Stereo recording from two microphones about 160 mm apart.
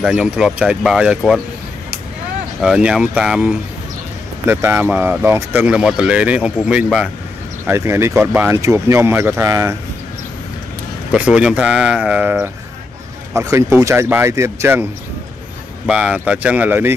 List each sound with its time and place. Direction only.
0.0 s speech: 5° right (ahead or behind)
2.6 s speech: 5° right (ahead or behind)
7.6 s speech: 15° right (ahead or behind)
11.1 s speech: 5° right (ahead or behind)
15.9 s speech: 5° right (ahead or behind)